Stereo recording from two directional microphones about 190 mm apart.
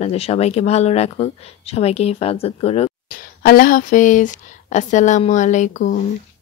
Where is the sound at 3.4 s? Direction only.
50° left (ahead or behind).